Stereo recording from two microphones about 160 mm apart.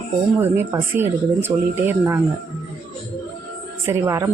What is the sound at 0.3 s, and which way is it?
A man's voice, 15° right (ahead or behind).